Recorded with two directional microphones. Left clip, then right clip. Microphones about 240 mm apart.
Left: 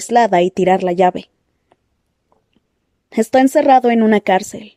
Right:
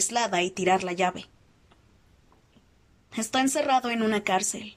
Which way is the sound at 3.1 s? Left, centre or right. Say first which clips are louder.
Left 13 dB; left.